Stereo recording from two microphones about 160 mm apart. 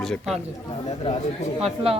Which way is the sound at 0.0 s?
Centre (ahead or behind).